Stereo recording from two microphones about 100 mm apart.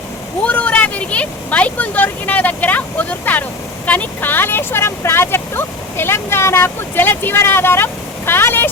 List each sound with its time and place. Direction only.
0.4 s speech: 15° left (ahead or behind)